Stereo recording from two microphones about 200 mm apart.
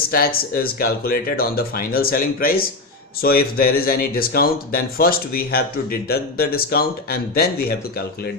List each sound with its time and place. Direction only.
0.1 s speech: 50° left (ahead or behind)